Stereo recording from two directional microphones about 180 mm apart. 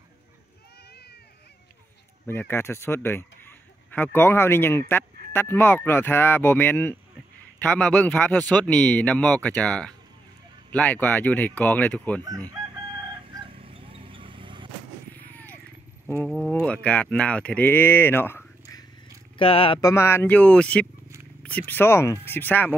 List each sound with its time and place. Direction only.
2.2 s speech: 10° left (ahead or behind)
13.3 s vehicle: 25° right (ahead or behind)
15.1 s a sound: 10° left (ahead or behind)
16.2 s speech: 5° left (ahead or behind)
19.3 s speech: 30° left (ahead or behind)
19.8 s speech: 15° left (ahead or behind)